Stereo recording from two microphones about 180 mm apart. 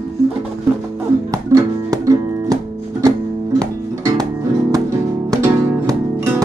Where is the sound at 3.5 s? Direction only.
20° right (ahead or behind).